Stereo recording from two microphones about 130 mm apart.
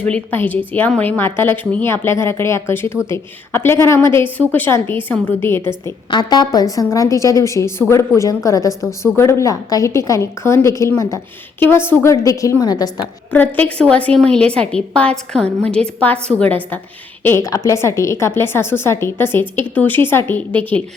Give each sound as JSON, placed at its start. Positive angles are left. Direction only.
{"t": 0.0, "sound": "a woman's voice", "side_deg": 10}
{"t": 6.1, "sound": "a woman's voice", "side_deg": 35}
{"t": 13.3, "sound": "a woman's voice", "side_deg": 15}